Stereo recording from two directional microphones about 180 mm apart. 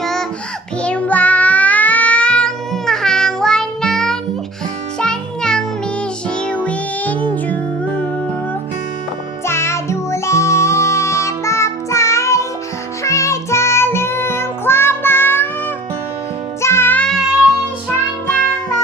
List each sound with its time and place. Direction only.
0.0 s music: 5° left (ahead or behind)
9.5 s music: 15° left (ahead or behind)
16.6 s music: 15° left (ahead or behind)